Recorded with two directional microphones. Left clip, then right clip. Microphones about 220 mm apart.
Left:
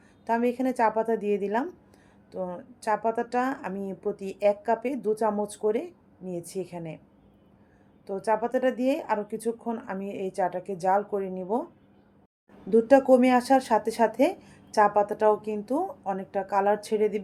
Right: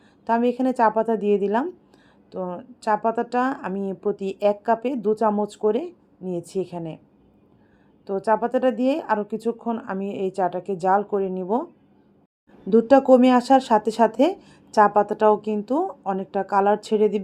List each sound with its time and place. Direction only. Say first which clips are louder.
0.3 s speech: right 5 dB; 20° right (ahead or behind)
8.0 s speech: right 5 dB; 15° right (ahead or behind)
12.7 s speech: right 4 dB; 20° right (ahead or behind)